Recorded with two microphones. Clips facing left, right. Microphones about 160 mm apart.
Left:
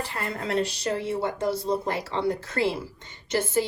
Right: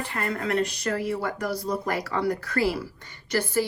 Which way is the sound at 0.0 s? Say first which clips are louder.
Right 2 dB; 30° left (ahead or behind).